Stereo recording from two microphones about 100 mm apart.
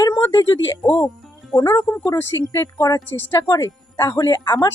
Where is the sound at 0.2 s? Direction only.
30° left (ahead or behind).